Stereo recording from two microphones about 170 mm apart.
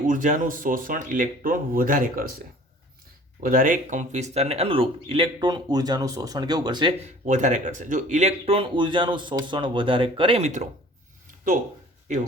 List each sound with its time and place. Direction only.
0.0 s speech: 50° right (ahead or behind)
3.4 s speech: 55° right (ahead or behind); by 6.9 s 25° right (ahead or behind)
7.0 s speech: 45° right (ahead or behind)